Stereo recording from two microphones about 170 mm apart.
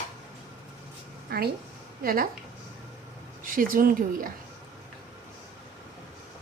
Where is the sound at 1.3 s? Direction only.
65° right (ahead or behind).